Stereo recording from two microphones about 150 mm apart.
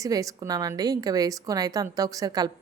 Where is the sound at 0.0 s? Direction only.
25° right (ahead or behind).